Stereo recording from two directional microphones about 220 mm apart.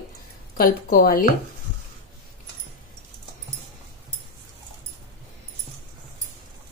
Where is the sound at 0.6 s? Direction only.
40° left (ahead or behind).